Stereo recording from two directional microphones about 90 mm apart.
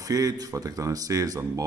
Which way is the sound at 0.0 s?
40° right (ahead or behind).